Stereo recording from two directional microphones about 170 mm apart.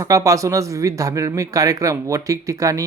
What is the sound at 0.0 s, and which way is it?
Speech, 20° right (ahead or behind).